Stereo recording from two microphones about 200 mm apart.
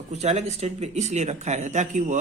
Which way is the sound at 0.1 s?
35° right (ahead or behind).